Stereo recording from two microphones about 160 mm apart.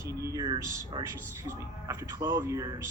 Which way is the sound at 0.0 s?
20° right (ahead or behind).